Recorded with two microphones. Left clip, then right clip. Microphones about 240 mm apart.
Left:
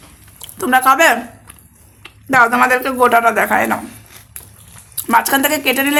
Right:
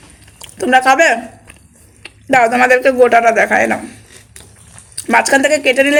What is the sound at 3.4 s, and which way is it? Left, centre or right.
Speech, centre.